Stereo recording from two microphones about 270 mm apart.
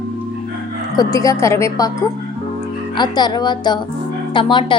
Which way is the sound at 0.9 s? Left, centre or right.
Centre.